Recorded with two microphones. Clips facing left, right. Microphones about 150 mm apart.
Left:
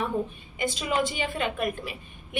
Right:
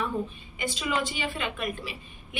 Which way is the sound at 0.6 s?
45° left (ahead or behind).